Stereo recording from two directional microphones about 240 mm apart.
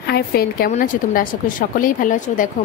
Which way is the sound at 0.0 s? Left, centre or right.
Left.